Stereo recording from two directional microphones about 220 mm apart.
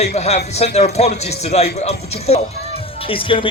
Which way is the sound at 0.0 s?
30° left (ahead or behind).